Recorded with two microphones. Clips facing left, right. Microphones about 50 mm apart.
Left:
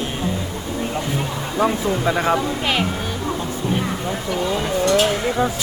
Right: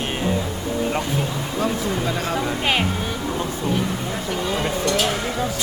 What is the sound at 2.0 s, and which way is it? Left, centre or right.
Speech, left.